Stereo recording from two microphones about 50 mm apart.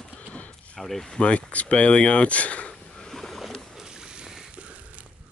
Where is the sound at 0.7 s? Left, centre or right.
Centre.